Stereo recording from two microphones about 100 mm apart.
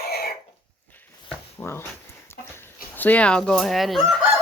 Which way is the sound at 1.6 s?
25° left (ahead or behind).